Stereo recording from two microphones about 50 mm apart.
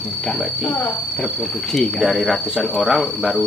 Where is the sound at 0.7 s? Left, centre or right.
Left.